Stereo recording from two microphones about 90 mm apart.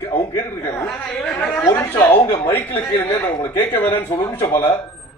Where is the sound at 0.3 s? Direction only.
25° left (ahead or behind).